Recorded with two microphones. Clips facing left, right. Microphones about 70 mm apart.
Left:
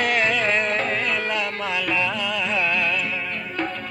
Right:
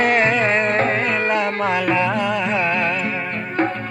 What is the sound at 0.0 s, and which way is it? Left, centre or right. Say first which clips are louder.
Music: right 5 dB; right.